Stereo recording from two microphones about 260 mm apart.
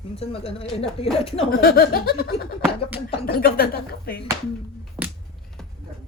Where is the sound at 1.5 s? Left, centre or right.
Left.